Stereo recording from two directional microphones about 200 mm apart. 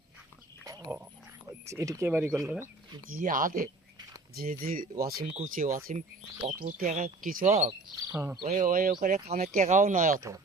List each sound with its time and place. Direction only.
0.7 s pig: 10° right (ahead or behind)
1.6 s speech: 15° right (ahead or behind)
3.1 s speech: 40° right (ahead or behind)
8.1 s speech: 10° right (ahead or behind)
8.4 s speech: 45° right (ahead or behind)
10.2 s speech: 15° right (ahead or behind)